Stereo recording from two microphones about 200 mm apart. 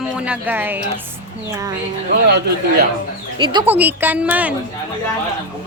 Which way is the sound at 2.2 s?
55° right (ahead or behind).